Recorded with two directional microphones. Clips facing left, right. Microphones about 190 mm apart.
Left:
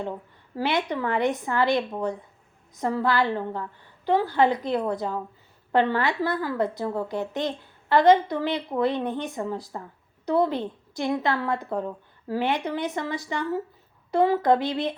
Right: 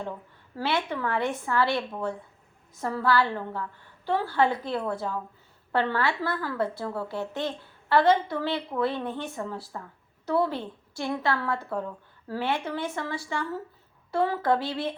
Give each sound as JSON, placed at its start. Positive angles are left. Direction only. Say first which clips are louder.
{"t": 0.5, "sound": "a woman's voice", "louder": "left 3 dB", "side_deg": 15}